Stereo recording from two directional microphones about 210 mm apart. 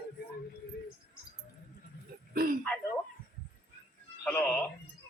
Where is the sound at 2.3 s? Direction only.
45° right (ahead or behind).